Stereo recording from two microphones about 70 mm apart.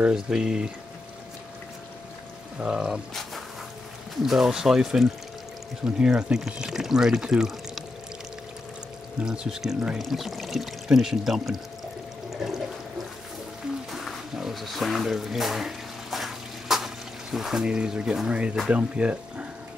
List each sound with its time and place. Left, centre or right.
0.0 s speech: centre
2.6 s speech: centre
4.2 s speech: centre
9.2 s speech: centre
12.3 s toilet flush: centre
13.9 s a sound: centre
18.7 s speech: centre